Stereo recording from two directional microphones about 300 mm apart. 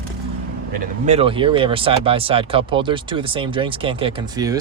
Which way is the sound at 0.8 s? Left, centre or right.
Right.